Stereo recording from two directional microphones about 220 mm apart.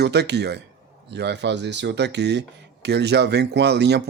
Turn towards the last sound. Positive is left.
turn(degrees=-50)  # may be behind; listen again after turning